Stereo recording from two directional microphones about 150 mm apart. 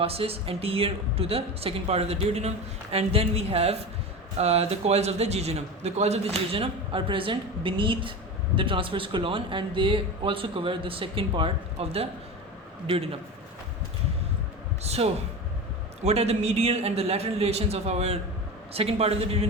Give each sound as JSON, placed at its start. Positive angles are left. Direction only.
{"t": 0.0, "sound": "a man's voice", "side_deg": -40}
{"t": 14.8, "sound": "a man's voice", "side_deg": -45}